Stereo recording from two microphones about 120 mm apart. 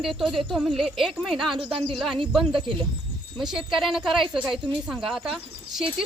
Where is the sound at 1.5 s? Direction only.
45° right (ahead or behind).